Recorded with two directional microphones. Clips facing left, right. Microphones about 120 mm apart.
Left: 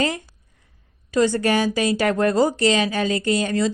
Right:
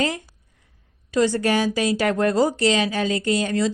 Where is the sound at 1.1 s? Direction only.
50° left (ahead or behind).